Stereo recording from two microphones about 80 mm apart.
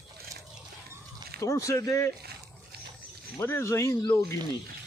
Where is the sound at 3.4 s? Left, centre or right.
Left.